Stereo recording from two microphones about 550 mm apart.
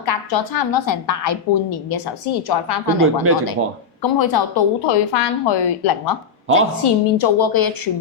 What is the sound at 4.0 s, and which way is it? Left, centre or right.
Speech, left.